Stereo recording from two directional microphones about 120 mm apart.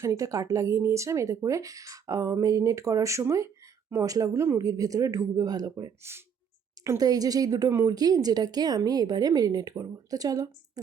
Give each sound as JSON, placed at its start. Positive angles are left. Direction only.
{"t": 0.0, "sound": "speech", "side_deg": -25}
{"t": 6.0, "sound": "speech", "side_deg": -20}